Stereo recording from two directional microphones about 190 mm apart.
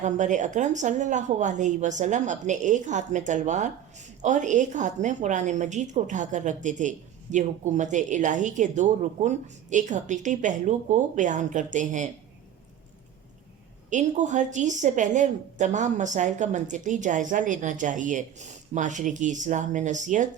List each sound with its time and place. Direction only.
0.0 s a woman's voice: 40° right (ahead or behind)
13.9 s a woman's voice: 40° right (ahead or behind)